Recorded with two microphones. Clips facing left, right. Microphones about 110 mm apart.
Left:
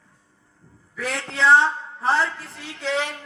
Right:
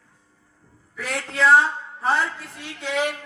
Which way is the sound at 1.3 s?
30° left (ahead or behind).